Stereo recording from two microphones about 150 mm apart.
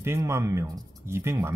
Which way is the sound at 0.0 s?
15° right (ahead or behind).